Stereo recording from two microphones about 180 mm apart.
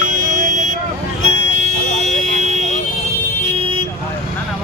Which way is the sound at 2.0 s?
40° right (ahead or behind).